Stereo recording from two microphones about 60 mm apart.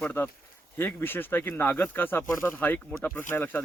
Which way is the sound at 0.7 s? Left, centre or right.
Left.